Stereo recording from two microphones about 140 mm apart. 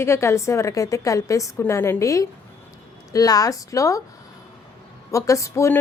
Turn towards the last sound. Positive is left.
turn(degrees=20)  # may be behind; listen again after turning